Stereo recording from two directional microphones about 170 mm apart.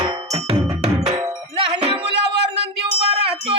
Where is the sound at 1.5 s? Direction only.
30° right (ahead or behind).